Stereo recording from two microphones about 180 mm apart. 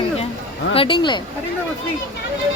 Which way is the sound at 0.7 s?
30° left (ahead or behind).